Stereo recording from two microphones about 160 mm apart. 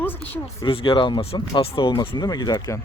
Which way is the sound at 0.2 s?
35° left (ahead or behind).